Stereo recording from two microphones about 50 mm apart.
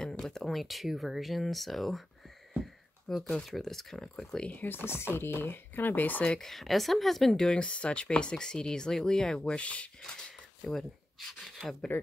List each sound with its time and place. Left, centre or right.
0.0 s a sound: centre
0.5 s speech: centre
2.6 s a sound: centre
3.4 s speech: centre
4.6 s speech: left
6.4 s speech: centre
7.4 s speech: left
9.6 s speech: left
10.7 s speech: centre